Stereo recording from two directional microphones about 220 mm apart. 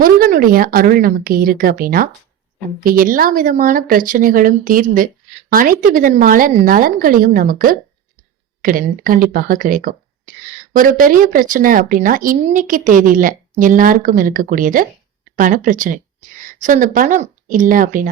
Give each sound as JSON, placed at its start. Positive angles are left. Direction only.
{"t": 0.0, "sound": "speech", "side_deg": -40}